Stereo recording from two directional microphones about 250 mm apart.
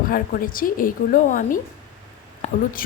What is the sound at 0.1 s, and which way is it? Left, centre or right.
A woman's voice, left.